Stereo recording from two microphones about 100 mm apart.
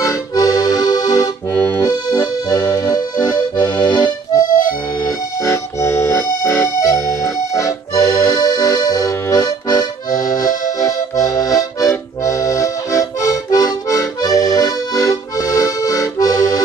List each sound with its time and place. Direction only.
0.0 s accordion: 35° left (ahead or behind)
1.5 s accordion: 15° left (ahead or behind)
1.8 s accordion: 35° left (ahead or behind)